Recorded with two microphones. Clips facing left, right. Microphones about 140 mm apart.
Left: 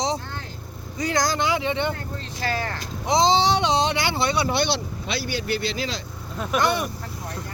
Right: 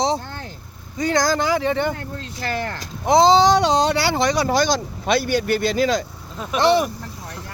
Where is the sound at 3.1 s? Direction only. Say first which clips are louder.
Right 6 dB; 40° right (ahead or behind).